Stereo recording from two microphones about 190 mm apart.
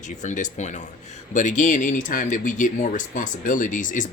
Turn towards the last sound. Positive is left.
turn(degrees=45)  # may be behind; listen again after turning